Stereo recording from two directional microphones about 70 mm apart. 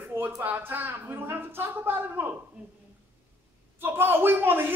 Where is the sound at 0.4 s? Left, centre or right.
Right.